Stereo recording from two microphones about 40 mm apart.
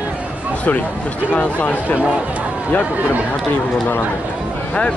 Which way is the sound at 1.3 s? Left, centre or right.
Left.